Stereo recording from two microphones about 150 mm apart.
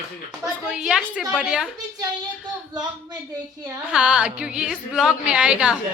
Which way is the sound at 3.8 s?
5° right (ahead or behind).